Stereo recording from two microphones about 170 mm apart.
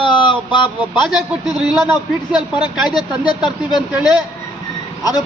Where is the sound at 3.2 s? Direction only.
25° left (ahead or behind).